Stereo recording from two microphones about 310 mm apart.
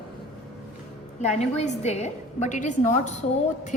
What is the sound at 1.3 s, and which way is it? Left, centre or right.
A woman's voice, left.